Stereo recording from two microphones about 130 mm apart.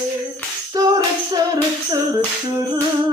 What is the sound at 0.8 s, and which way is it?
Music, 25° right (ahead or behind).